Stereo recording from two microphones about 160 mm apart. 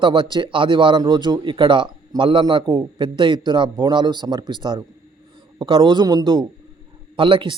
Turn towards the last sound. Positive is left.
turn(degrees=-30)  # may be behind; listen again after turning